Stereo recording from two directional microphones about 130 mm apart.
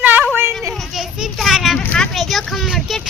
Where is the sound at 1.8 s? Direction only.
10° left (ahead or behind).